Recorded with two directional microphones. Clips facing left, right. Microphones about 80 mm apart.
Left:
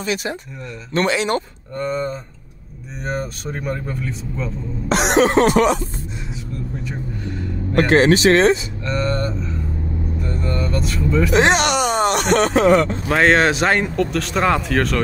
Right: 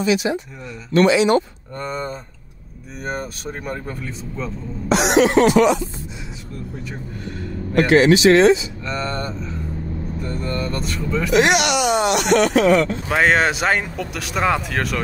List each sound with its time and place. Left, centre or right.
0.0 s cough: left
1.8 s speech: right
3.0 s speech: centre
4.8 s cough: left
7.7 s cough: left
8.8 s speech: centre
11.3 s speech: left
13.1 s speech: centre